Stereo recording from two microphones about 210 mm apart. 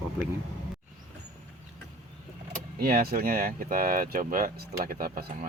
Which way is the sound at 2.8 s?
45° right (ahead or behind).